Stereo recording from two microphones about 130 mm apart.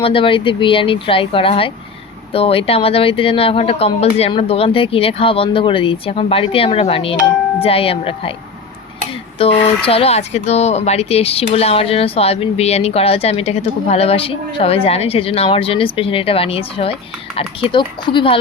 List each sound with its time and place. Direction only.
0.0 s speech: 45° left (ahead or behind)
9.6 s speech: 50° left (ahead or behind)